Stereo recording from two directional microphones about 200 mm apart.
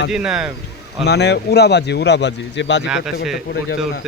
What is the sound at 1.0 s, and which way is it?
A man's voice, 55° left (ahead or behind).